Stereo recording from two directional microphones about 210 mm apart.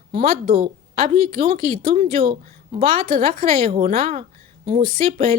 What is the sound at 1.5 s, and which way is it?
Speech, 45° right (ahead or behind).